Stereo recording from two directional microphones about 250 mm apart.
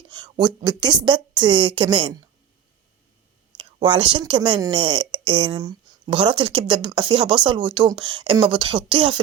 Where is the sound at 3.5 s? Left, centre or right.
Centre.